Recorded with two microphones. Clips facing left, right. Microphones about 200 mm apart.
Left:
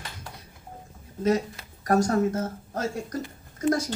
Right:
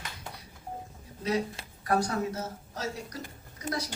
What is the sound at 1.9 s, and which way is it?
A woman's voice, 45° left (ahead or behind).